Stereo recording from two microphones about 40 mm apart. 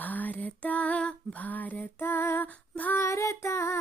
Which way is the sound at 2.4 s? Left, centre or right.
Left.